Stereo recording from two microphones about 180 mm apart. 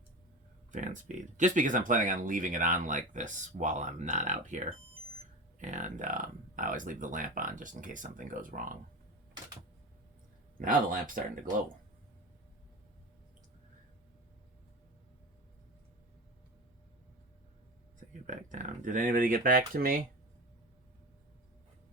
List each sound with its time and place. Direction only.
0.7 s speech: 45° right (ahead or behind)
10.6 s speech: 50° right (ahead or behind)
18.3 s speech: 45° right (ahead or behind)